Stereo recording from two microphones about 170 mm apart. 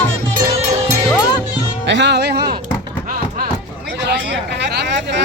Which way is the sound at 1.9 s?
90° right.